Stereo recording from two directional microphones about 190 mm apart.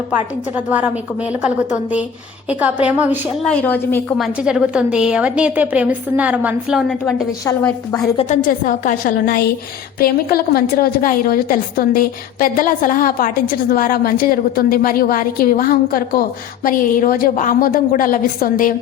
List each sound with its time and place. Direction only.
0.1 s a woman's voice: 10° right (ahead or behind)
3.5 s a woman's voice: 10° left (ahead or behind)
4.4 s a woman's voice: 5° right (ahead or behind)
7.0 s a woman's voice: 10° left (ahead or behind)
8.1 s a woman's voice: 30° left (ahead or behind)
8.4 s a woman's voice: 45° left (ahead or behind)